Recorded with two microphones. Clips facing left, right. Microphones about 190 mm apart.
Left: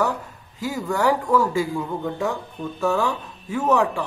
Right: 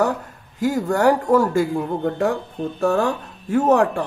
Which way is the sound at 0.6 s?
50° right (ahead or behind).